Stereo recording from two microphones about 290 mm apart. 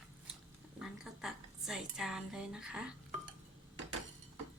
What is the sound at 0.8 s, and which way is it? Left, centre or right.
A woman's voice, centre.